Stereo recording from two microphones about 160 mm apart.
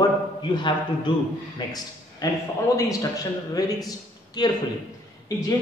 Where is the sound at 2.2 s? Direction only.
25° left (ahead or behind).